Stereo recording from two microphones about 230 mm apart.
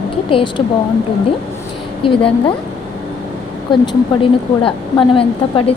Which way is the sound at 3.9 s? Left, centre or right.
Left.